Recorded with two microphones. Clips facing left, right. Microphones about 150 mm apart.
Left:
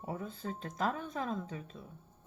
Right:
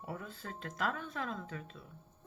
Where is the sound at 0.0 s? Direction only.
25° left (ahead or behind).